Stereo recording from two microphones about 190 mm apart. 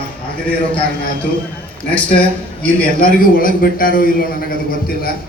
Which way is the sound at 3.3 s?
45° left (ahead or behind).